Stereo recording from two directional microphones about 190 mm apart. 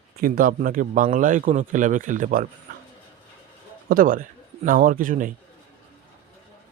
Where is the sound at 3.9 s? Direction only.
50° right (ahead or behind).